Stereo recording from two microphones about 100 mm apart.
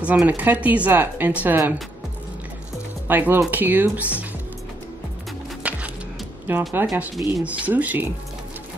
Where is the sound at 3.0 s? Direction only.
20° right (ahead or behind).